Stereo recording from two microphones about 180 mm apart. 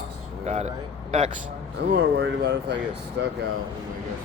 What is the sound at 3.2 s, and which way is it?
Speech, 80° right.